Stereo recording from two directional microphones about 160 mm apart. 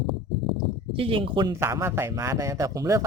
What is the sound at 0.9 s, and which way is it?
Speech, 35° right (ahead or behind).